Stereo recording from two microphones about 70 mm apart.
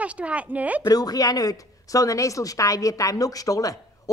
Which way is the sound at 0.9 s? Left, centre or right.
Left.